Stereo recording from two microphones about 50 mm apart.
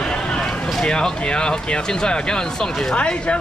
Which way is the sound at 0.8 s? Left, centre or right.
Centre.